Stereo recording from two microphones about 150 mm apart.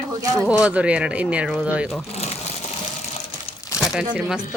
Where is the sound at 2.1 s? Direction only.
45° left (ahead or behind).